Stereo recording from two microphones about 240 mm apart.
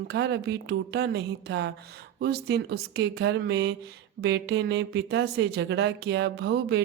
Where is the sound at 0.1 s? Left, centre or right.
Right.